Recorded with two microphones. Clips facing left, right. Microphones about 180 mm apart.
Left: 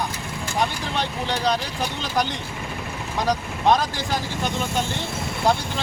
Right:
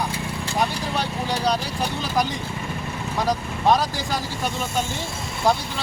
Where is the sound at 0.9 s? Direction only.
5° right (ahead or behind).